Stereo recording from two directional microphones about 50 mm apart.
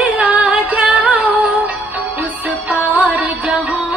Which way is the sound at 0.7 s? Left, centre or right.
Right.